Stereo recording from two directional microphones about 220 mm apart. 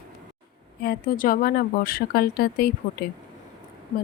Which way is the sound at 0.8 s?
40° left (ahead or behind).